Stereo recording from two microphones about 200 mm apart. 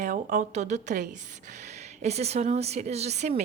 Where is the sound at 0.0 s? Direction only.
35° right (ahead or behind).